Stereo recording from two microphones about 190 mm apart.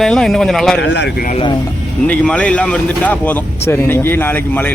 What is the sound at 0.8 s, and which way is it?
Speech, 65° left (ahead or behind).